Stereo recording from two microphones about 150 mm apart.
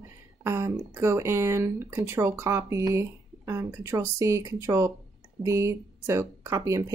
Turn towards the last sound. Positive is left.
turn(degrees=-20)  # may be behind; listen again after turning